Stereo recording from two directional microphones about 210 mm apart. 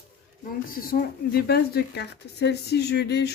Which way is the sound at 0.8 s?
45° left (ahead or behind).